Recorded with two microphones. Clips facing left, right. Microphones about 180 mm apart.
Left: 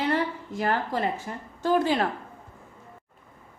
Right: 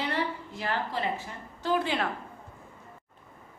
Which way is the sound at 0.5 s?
45° left (ahead or behind).